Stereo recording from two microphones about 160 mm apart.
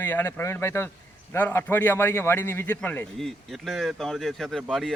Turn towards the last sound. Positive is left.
turn(degrees=0)  # may be behind; listen again after turning